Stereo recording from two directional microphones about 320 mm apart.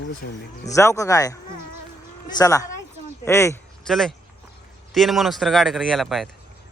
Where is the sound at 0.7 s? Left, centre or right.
Centre.